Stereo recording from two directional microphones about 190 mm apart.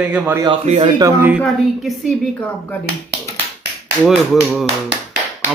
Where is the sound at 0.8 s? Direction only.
20° right (ahead or behind).